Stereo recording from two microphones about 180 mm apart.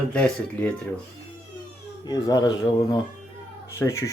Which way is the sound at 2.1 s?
20° left (ahead or behind).